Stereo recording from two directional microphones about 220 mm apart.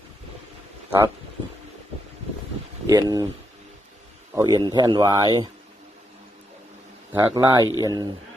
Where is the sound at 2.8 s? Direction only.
15° right (ahead or behind).